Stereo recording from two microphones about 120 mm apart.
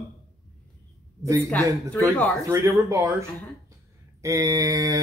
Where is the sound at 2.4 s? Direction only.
25° right (ahead or behind).